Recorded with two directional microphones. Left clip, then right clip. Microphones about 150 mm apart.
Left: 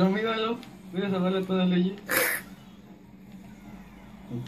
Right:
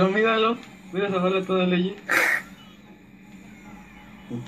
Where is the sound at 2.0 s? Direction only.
45° left (ahead or behind).